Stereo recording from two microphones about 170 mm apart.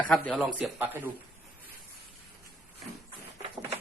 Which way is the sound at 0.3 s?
10° right (ahead or behind).